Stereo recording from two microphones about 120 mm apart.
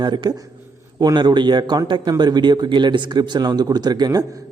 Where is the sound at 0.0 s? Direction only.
40° right (ahead or behind).